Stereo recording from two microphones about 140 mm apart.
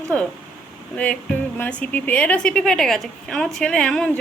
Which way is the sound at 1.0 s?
10° left (ahead or behind).